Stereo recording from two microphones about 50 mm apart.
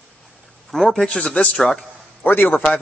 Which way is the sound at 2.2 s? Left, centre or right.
Left.